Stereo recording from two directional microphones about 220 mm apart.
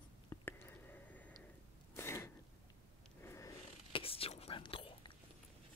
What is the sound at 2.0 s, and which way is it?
Sneeze, 10° left (ahead or behind).